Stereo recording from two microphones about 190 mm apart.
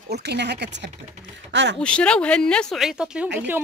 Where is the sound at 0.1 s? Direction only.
60° right (ahead or behind).